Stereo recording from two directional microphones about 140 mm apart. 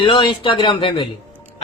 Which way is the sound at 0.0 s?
35° left (ahead or behind).